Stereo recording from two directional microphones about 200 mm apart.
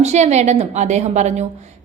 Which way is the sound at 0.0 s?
35° right (ahead or behind).